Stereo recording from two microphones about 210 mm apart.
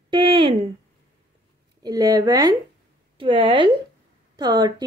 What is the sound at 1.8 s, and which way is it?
Speech, 15° right (ahead or behind).